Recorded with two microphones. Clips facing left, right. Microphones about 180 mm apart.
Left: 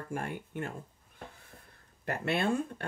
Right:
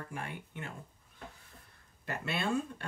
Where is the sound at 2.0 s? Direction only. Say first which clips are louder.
Left 5 dB; 55° left (ahead or behind).